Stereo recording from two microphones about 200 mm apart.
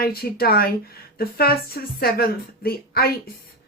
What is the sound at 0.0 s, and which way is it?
Speech, 50° left (ahead or behind).